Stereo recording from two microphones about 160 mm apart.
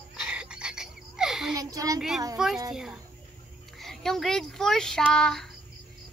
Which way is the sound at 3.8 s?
Centre (ahead or behind).